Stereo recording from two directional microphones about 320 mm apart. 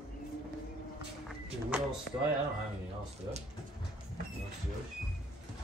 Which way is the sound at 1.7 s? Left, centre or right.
Centre.